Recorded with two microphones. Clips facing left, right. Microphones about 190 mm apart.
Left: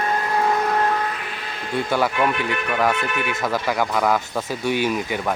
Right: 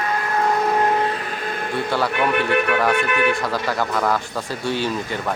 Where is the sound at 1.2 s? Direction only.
45° right (ahead or behind).